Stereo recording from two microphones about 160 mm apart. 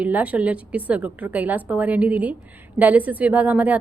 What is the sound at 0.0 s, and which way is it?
Speech, 10° right (ahead or behind).